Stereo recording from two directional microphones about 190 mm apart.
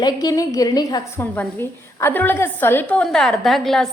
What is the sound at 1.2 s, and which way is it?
A woman's voice, 10° left (ahead or behind).